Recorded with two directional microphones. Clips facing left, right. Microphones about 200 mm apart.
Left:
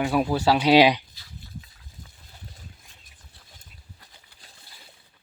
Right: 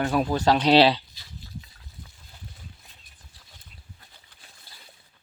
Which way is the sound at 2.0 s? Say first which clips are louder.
Right 1 dB; 45° left (ahead or behind).